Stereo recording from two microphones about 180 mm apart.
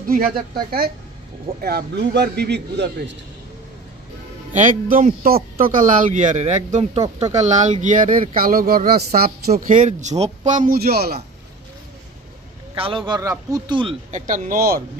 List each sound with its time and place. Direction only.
0.1 s a woman's voice: 55° right (ahead or behind); by 3.2 s 70° right (ahead or behind)
4.6 s speech: 45° right (ahead or behind)
12.7 s speech: 30° right (ahead or behind)
14.1 s speech: 45° right (ahead or behind)